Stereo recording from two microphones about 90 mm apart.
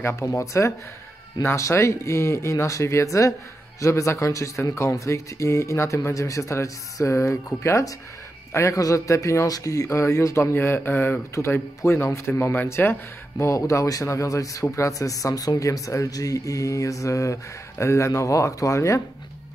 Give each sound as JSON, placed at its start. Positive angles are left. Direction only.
{"t": 0.0, "sound": "speech", "side_deg": 30}